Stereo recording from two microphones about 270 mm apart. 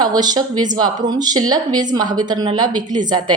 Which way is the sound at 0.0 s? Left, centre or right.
Centre.